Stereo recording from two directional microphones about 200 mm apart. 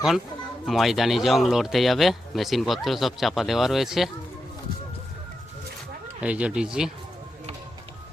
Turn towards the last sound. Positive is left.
turn(degrees=-5)  # may be behind; listen again after turning